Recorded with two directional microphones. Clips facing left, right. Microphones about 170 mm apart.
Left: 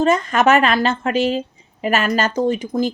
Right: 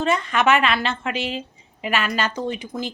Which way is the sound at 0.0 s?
40° left (ahead or behind).